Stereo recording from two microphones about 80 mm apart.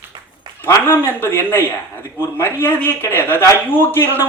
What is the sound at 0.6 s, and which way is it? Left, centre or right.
A man's voice, left.